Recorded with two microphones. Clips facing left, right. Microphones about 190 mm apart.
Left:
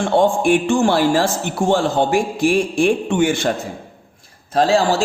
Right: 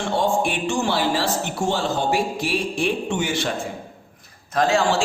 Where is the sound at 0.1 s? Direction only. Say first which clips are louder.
Left 7 dB; 50° left (ahead or behind).